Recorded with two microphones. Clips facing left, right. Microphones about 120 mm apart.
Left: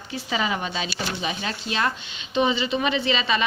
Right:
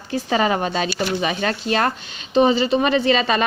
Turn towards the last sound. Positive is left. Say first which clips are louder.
# right 6 dB
turn(degrees=-45)  # may be behind; listen again after turning